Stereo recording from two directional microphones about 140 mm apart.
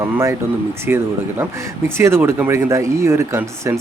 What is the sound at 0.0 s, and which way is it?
Speech, 20° right (ahead or behind).